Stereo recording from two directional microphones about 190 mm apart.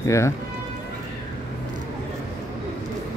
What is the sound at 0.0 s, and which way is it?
Speech, 15° left (ahead or behind).